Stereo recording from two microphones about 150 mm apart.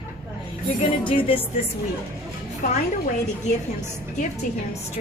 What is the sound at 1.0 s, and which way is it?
Speech, 35° left (ahead or behind).